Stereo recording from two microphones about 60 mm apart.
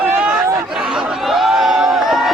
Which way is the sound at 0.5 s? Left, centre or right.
Centre.